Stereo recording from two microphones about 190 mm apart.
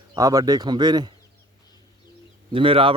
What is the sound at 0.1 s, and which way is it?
A man's voice, 20° right (ahead or behind).